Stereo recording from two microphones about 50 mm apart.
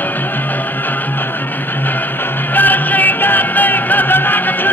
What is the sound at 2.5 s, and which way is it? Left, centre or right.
Music, left.